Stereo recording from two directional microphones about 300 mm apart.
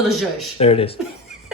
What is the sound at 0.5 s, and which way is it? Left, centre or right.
Speech, centre.